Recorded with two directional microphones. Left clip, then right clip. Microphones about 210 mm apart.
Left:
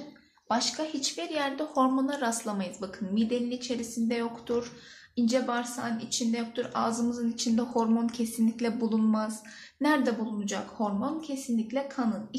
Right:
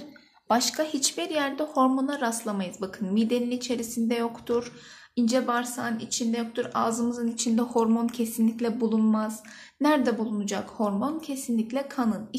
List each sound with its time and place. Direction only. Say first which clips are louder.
0.5 s a woman's voice: right 5 dB; 50° right (ahead or behind)